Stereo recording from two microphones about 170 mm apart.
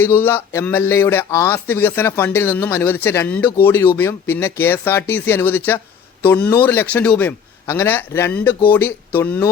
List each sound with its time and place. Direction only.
0.0 s speech: 10° left (ahead or behind)